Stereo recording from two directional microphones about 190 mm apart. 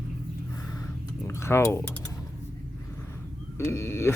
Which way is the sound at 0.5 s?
20° left (ahead or behind).